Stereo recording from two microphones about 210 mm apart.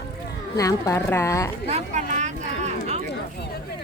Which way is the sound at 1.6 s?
30° right (ahead or behind).